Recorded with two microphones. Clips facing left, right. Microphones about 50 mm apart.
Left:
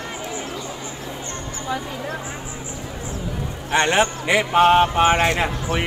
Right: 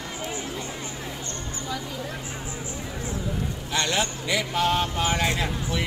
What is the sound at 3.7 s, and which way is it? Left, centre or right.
Speech, left.